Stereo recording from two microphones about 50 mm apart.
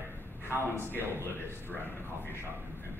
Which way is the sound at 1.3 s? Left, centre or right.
Left.